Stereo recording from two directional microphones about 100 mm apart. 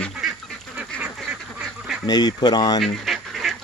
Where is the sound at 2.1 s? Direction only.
45° left (ahead or behind).